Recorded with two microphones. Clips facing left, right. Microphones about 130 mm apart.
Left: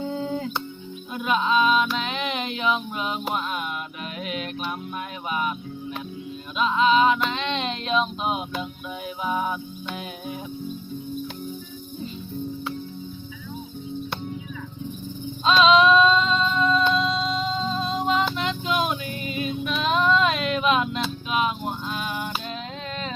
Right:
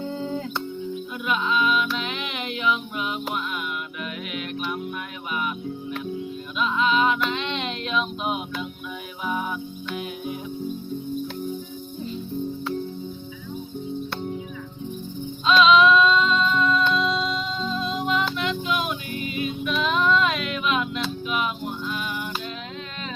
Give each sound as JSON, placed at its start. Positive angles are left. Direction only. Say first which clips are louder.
{"t": 0.1, "sound": "music", "louder": "left 1 dB", "side_deg": 5}
{"t": 1.1, "sound": "music", "louder": "left 4 dB", "side_deg": 30}
{"t": 6.6, "sound": "music", "louder": "left 3 dB", "side_deg": 30}
{"t": 15.4, "sound": "female singing", "louder": "even", "side_deg": 35}
{"t": 16.9, "sound": "music", "louder": "even", "side_deg": 30}